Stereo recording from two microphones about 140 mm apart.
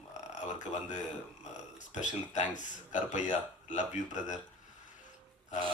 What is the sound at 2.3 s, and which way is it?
Speech, 60° left (ahead or behind).